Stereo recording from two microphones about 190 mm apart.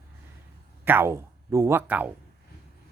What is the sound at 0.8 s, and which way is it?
Speech, 10° right (ahead or behind).